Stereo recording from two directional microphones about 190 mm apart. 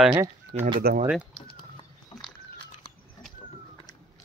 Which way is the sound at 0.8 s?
50° right (ahead or behind).